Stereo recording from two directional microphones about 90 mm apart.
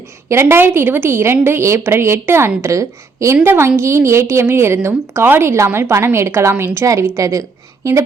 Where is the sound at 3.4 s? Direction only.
25° right (ahead or behind).